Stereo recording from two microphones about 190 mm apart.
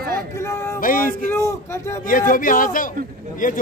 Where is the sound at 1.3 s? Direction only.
15° left (ahead or behind).